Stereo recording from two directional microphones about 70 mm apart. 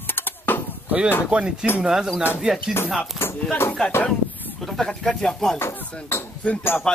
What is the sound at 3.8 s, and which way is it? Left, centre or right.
Speech, centre.